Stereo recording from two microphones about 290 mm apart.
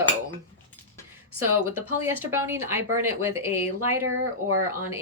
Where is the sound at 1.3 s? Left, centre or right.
Right.